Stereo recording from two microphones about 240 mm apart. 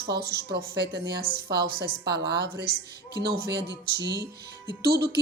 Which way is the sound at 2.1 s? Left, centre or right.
Right.